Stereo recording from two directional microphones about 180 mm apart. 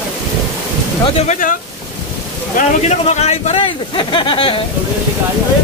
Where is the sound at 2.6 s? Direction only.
40° left (ahead or behind).